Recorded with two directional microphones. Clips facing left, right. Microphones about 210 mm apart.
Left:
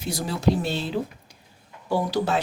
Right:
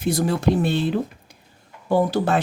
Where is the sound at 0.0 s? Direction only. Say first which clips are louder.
Right 4 dB; 55° right (ahead or behind).